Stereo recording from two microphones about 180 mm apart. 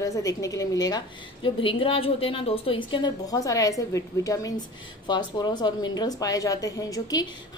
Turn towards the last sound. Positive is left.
turn(degrees=20)  # may be behind; listen again after turning